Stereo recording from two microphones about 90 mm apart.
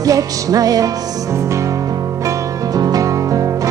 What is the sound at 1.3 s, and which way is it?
Music, 35° right (ahead or behind).